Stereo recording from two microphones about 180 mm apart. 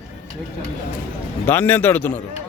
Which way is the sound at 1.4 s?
10° left (ahead or behind).